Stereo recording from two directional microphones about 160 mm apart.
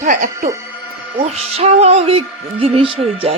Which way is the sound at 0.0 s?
55° right (ahead or behind).